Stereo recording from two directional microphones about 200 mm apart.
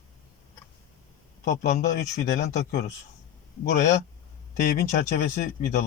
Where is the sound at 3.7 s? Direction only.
40° left (ahead or behind).